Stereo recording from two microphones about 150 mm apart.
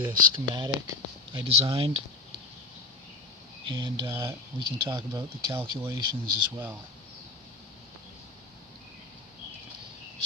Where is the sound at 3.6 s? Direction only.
30° right (ahead or behind).